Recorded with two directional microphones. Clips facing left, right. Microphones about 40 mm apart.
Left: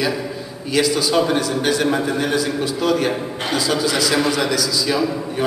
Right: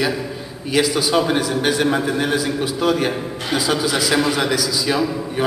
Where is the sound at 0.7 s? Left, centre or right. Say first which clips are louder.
Even; centre.